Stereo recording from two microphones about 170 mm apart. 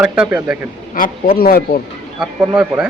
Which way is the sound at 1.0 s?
65° left (ahead or behind).